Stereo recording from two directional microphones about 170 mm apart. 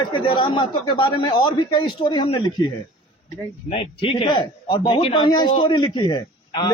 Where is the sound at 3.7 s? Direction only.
35° left (ahead or behind).